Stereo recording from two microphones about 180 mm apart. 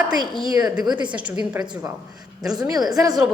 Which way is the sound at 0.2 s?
25° left (ahead or behind).